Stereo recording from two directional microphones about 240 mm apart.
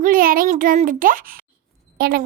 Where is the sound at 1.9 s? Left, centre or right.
Right.